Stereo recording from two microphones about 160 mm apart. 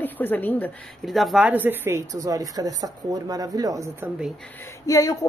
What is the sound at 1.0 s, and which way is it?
A woman's voice, centre (ahead or behind).